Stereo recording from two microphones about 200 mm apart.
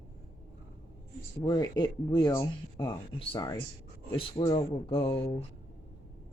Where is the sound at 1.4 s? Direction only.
20° left (ahead or behind).